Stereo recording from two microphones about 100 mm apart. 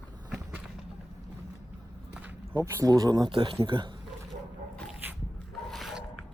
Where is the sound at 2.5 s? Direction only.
35° right (ahead or behind); by 3.9 s 50° right (ahead or behind).